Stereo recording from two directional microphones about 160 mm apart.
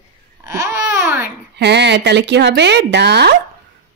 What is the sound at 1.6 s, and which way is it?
Speech, 90° right.